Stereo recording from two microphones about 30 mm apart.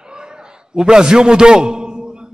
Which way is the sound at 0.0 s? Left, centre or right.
Right.